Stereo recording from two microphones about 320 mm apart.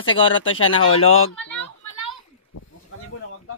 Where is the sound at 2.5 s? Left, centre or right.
Left.